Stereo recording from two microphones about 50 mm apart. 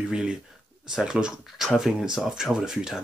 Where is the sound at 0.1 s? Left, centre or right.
Centre.